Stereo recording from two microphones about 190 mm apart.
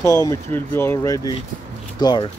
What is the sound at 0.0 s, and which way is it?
Speech, 15° left (ahead or behind).